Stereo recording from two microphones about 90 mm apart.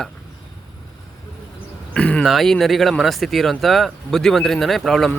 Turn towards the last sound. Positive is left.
turn(degrees=5)  # may be behind; listen again after turning